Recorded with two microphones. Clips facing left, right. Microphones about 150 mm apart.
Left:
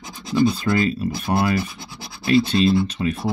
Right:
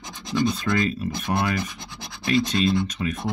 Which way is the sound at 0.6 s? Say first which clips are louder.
Left 3 dB; 5° left (ahead or behind).